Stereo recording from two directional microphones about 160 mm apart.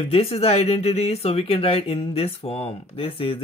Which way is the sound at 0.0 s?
35° left (ahead or behind).